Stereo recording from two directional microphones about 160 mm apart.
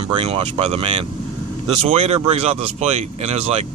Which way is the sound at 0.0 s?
35° right (ahead or behind).